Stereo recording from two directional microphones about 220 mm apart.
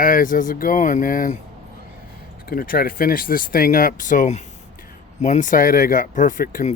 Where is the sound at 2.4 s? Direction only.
40° left (ahead or behind).